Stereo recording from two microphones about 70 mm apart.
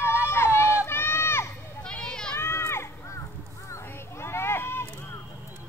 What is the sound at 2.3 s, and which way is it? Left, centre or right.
Run, left.